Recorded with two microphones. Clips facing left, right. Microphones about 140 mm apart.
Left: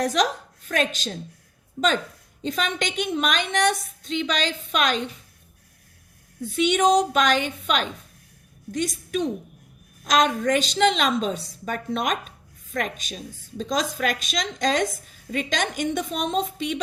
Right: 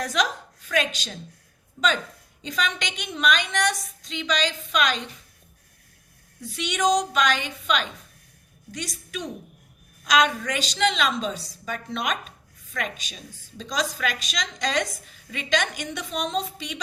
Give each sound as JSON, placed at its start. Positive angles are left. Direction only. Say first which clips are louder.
{"t": 0.0, "sound": "a woman's voice", "louder": "left 4 dB", "side_deg": 45}
{"t": 2.4, "sound": "a woman's voice", "louder": "left 3 dB", "side_deg": 50}
{"t": 6.4, "sound": "a woman's voice", "louder": "left 5 dB", "side_deg": 55}
{"t": 10.0, "sound": "a woman's voice", "louder": "left 1 dB", "side_deg": 45}